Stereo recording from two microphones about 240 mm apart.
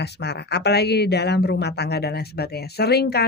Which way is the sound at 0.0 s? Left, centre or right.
Left.